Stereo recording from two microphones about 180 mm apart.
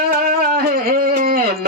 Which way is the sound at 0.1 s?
55° right (ahead or behind).